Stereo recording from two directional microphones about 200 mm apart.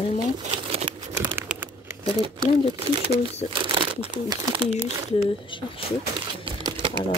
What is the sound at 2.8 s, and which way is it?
Speech, 30° right (ahead or behind).